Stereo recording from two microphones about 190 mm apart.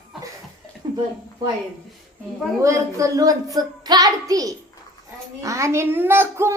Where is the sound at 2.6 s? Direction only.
15° right (ahead or behind).